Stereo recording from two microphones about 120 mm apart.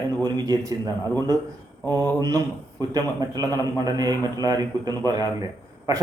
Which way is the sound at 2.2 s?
30° right (ahead or behind).